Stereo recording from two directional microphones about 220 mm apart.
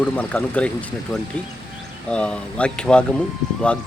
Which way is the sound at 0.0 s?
5° left (ahead or behind).